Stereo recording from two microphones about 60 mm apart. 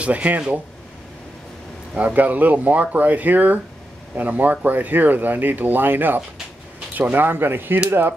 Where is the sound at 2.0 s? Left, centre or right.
Right.